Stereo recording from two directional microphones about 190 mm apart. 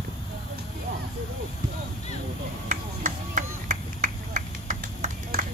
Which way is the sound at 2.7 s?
45° right (ahead or behind).